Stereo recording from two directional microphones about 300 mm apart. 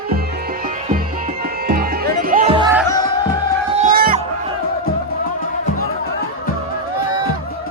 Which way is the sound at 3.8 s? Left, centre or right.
Right.